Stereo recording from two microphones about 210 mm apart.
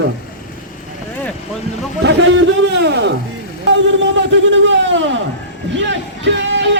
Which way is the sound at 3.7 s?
60° right (ahead or behind).